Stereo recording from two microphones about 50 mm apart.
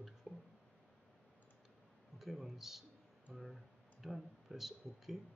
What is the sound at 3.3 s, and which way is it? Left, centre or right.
Speech, centre.